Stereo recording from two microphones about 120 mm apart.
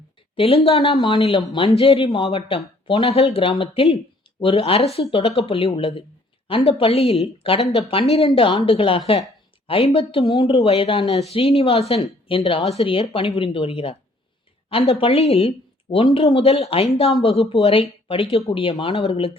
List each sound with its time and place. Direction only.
0.3 s a woman's voice: 55° left (ahead or behind)
1.0 s a woman's voice: 45° left (ahead or behind)